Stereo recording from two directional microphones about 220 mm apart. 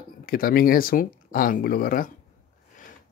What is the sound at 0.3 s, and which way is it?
Speech, 40° left (ahead or behind).